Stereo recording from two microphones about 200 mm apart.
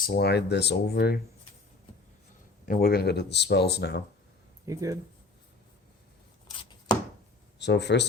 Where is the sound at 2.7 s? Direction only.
50° left (ahead or behind).